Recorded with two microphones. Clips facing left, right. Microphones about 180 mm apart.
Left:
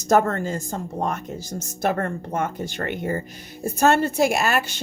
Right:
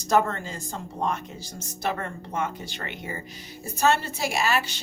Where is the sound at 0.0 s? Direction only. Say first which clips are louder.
Left 4 dB; 50° left (ahead or behind).